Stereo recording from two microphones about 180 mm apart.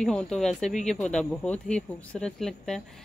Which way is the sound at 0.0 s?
5° left (ahead or behind).